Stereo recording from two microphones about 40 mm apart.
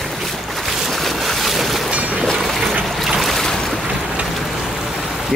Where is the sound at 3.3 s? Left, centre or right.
Centre.